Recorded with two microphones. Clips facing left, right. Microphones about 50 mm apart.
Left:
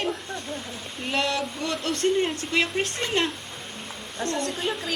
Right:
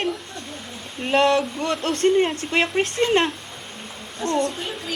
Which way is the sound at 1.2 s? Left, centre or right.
Right.